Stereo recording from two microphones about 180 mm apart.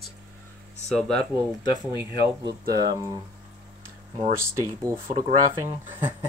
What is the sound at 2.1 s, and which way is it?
Speech, 65° right (ahead or behind).